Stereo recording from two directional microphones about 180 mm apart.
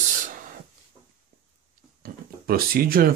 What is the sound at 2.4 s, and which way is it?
Speech, 55° right (ahead or behind).